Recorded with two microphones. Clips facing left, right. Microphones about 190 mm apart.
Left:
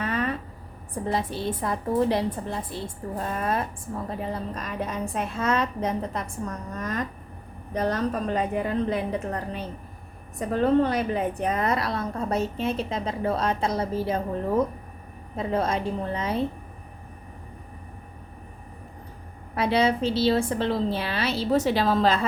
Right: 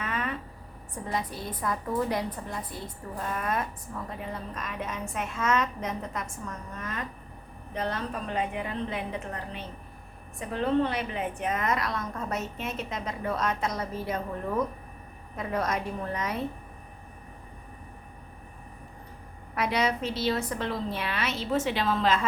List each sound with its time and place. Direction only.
0.0 s a sound: 35° left (ahead or behind)
1.0 s a woman's voice: 30° left (ahead or behind)
19.5 s a woman's voice: 30° left (ahead or behind)